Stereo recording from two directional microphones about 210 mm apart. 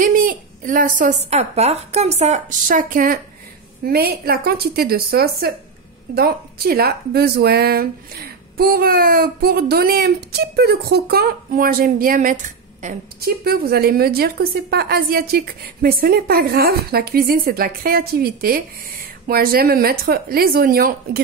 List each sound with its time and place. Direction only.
0.0 s a woman's voice: 40° right (ahead or behind)